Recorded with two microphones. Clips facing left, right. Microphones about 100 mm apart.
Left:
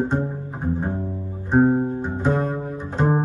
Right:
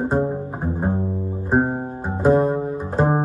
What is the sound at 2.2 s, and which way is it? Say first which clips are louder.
Double bass: right 8 dB; 15° right (ahead or behind).